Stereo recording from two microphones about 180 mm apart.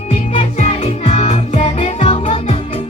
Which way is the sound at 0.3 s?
35° left (ahead or behind).